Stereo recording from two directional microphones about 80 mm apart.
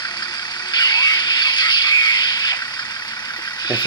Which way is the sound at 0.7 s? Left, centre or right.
Left.